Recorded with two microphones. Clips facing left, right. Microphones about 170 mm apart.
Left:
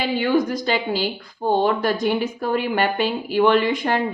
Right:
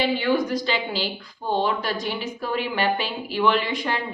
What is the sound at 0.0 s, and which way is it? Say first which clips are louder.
A woman's voice: left 2 dB; 45° left (ahead or behind).